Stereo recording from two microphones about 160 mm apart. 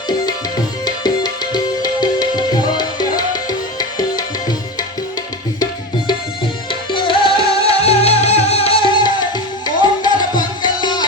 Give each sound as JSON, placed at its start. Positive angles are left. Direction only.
{"t": 0.9, "sound": "music", "side_deg": 25}
{"t": 3.8, "sound": "tabla", "side_deg": 25}
{"t": 6.7, "sound": "music", "side_deg": 30}